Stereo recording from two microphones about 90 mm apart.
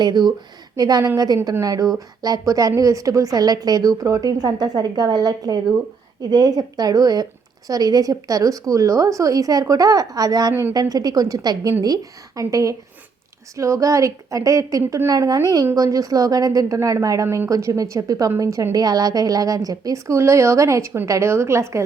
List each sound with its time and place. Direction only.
0.0 s a woman's voice: 50° right (ahead or behind)
10.5 s a woman's voice: 25° right (ahead or behind)
10.8 s a woman's voice: 45° right (ahead or behind)